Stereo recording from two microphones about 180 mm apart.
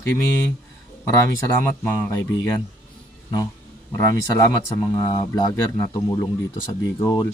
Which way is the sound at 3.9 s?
20° left (ahead or behind).